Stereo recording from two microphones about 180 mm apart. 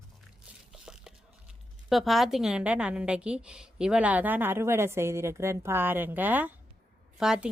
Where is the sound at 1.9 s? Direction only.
Centre (ahead or behind).